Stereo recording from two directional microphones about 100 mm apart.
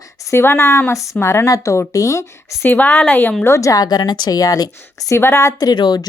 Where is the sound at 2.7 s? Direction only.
15° left (ahead or behind).